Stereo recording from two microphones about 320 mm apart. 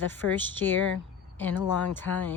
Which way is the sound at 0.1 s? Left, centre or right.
Centre.